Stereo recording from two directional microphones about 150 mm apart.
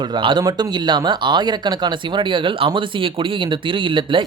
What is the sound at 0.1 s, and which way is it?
Speech, 30° right (ahead or behind).